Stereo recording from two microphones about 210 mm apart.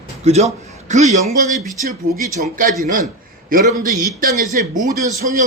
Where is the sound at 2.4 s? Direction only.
40° right (ahead or behind).